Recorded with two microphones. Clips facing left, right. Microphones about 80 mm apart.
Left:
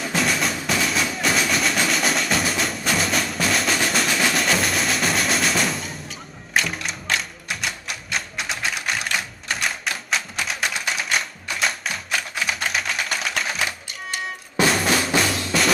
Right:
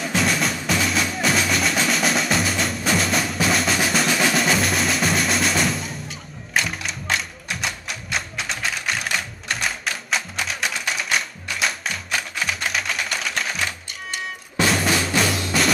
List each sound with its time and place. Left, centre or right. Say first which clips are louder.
0.0 s music: right 1 dB; centre